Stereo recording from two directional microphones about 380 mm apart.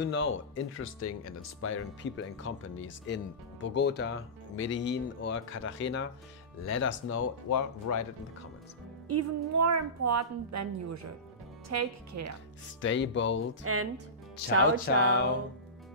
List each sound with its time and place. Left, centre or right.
0.0 s speech: left
9.1 s a woman's voice: right
12.8 s speech: left
13.7 s speech: right
15.0 s speech: left